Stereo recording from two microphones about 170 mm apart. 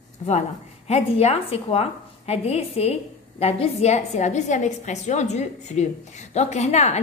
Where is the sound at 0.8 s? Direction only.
35° left (ahead or behind).